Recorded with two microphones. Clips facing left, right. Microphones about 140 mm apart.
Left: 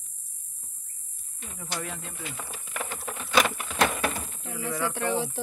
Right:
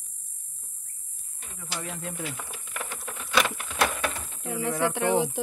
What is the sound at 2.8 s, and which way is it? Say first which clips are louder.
Patter: left 3 dB; 5° left (ahead or behind).